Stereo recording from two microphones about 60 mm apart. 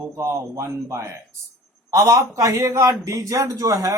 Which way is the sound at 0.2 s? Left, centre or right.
Right.